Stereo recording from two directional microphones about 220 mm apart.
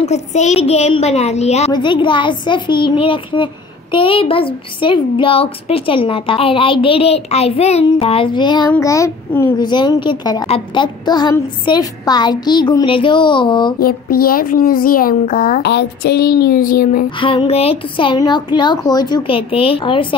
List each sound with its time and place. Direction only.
0.0 s a child's voice: 30° left (ahead or behind)
13.7 s a child's voice: 45° left (ahead or behind)
17.2 s a child's voice: 25° left (ahead or behind)